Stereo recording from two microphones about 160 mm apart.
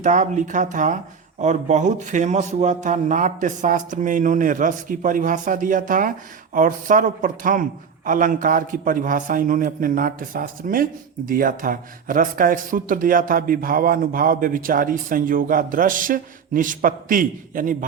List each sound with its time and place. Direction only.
0.0 s speech: 50° right (ahead or behind)